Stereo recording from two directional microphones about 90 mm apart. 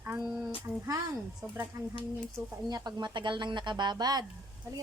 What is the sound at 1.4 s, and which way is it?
Speech, 30° right (ahead or behind).